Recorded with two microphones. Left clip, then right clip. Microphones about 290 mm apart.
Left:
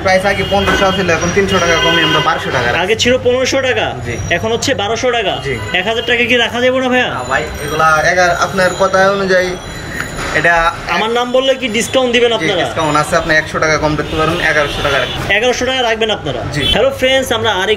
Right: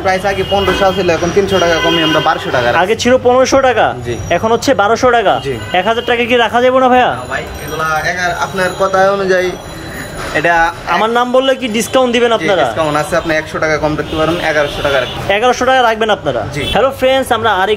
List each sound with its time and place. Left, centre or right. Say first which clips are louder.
0.0 s speech: left 1 dB; centre